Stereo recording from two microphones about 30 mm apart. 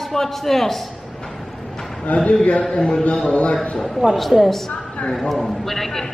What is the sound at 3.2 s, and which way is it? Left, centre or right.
Speech, left.